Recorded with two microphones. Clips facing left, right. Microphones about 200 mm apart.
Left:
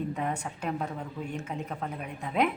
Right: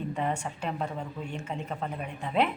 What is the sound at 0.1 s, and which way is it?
A woman's voice, 5° left (ahead or behind).